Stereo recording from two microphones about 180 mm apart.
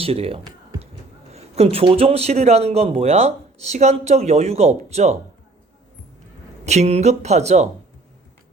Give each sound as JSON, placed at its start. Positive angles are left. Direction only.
{"t": 0.0, "sound": "a man's voice", "side_deg": -35}
{"t": 6.7, "sound": "a man's voice", "side_deg": -35}